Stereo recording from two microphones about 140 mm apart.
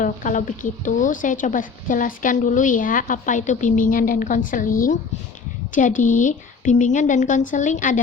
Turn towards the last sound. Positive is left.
turn(degrees=65)  # may be behind; listen again after turning